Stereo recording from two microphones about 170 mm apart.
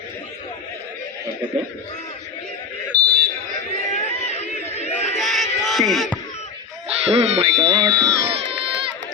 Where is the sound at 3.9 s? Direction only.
40° left (ahead or behind).